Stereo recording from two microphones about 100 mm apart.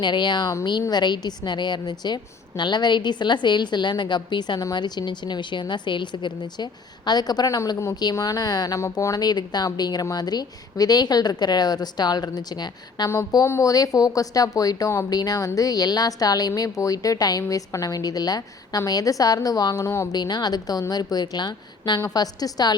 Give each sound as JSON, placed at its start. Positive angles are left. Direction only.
{"t": 0.0, "sound": "a woman's voice", "side_deg": 50}
{"t": 9.2, "sound": "a woman's voice", "side_deg": 45}
{"t": 13.4, "sound": "a woman's voice", "side_deg": 30}
{"t": 20.1, "sound": "a woman's voice", "side_deg": 45}